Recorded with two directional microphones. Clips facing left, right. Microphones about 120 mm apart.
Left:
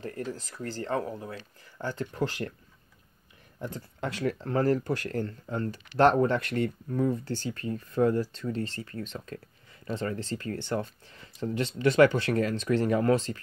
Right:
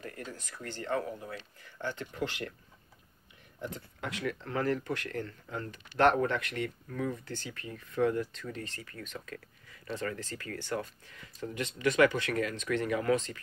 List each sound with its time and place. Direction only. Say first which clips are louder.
0.0 s speech: left 7 dB; 35° left (ahead or behind)
3.7 s speech: left 5 dB; 35° left (ahead or behind)